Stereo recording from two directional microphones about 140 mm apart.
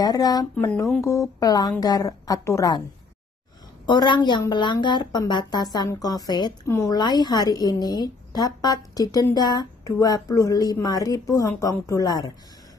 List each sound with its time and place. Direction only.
0.0 s a woman's voice: 30° left (ahead or behind)
3.8 s a woman's voice: 30° left (ahead or behind)